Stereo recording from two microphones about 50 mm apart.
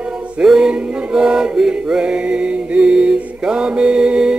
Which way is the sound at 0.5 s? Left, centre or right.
Centre.